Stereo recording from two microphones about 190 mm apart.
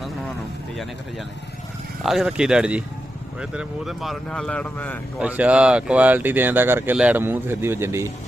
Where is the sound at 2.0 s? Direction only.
5° right (ahead or behind).